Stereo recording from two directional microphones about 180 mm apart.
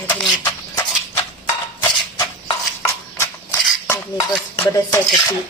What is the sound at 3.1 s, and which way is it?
Dishes, 15° left (ahead or behind).